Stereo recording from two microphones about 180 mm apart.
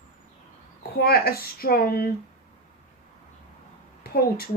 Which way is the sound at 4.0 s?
60° left (ahead or behind).